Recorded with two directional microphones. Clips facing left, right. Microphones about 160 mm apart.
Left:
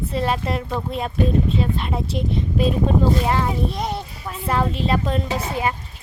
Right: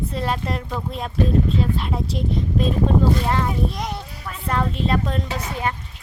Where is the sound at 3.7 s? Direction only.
25° left (ahead or behind).